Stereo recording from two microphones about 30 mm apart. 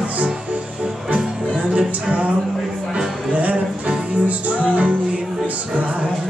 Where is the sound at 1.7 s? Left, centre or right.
Right.